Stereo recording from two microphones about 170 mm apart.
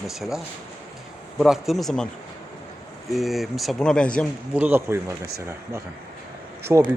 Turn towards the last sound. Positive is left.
turn(degrees=-15)  # may be behind; listen again after turning